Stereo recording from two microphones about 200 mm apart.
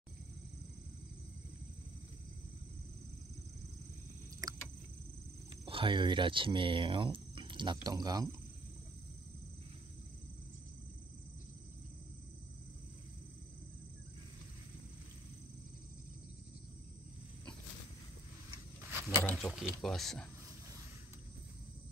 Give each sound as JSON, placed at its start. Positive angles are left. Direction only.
{"t": 4.4, "sound": "cricket", "side_deg": -20}
{"t": 5.7, "sound": "speech", "side_deg": -25}
{"t": 19.0, "sound": "a sound", "side_deg": 0}
{"t": 19.8, "sound": "speech", "side_deg": 0}